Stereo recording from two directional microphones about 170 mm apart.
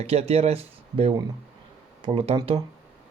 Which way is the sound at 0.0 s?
35° right (ahead or behind).